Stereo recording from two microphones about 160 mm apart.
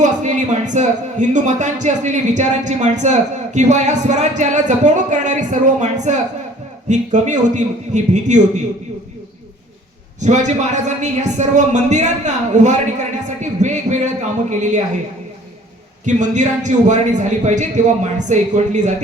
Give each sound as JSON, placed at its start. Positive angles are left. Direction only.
{"t": 0.0, "sound": "speech", "side_deg": -50}
{"t": 10.2, "sound": "speech", "side_deg": -45}
{"t": 13.4, "sound": "music", "side_deg": -50}
{"t": 14.5, "sound": "speech", "side_deg": -50}
{"t": 16.0, "sound": "speech", "side_deg": -50}